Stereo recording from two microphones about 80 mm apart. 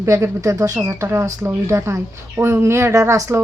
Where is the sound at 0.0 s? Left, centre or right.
Right.